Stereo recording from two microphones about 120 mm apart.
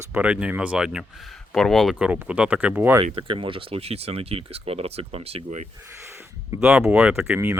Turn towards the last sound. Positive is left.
turn(degrees=-20)  # may be behind; listen again after turning